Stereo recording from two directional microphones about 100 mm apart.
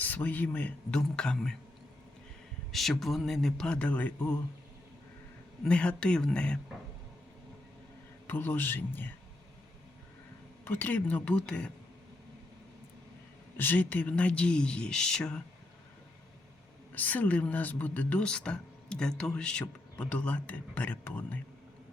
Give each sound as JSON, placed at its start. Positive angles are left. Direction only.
{"t": 0.0, "sound": "speech", "side_deg": 15}
{"t": 2.7, "sound": "speech", "side_deg": 0}
{"t": 5.6, "sound": "speech", "side_deg": 10}
{"t": 8.3, "sound": "a man's voice", "side_deg": 20}
{"t": 10.7, "sound": "speech", "side_deg": 20}
{"t": 13.6, "sound": "speech", "side_deg": 20}
{"t": 16.9, "sound": "speech", "side_deg": 15}